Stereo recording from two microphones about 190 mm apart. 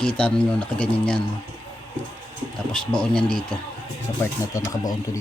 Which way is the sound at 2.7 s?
5° left (ahead or behind).